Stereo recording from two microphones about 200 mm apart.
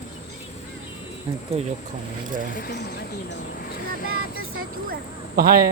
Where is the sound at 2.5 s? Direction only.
50° left (ahead or behind).